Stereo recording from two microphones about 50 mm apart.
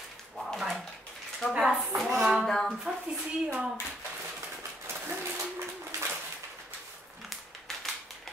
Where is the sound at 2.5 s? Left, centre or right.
Centre.